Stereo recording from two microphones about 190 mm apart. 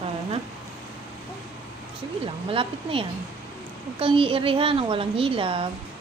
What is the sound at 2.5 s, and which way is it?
A woman's voice, 30° right (ahead or behind).